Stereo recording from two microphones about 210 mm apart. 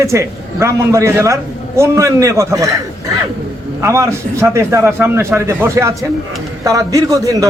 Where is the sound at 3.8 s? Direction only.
15° right (ahead or behind).